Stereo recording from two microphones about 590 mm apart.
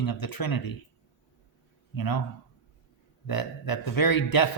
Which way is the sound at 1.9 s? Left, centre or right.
Left.